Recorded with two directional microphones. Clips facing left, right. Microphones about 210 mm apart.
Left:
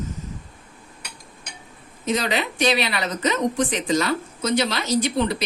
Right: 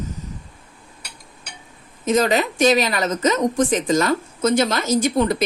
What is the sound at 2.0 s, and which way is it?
A woman's voice, 45° right (ahead or behind).